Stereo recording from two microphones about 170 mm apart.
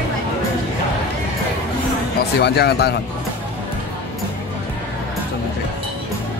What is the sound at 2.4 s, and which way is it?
Speech, 75° left (ahead or behind).